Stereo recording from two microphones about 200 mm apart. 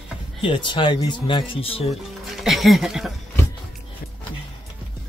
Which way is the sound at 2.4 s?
Centre (ahead or behind).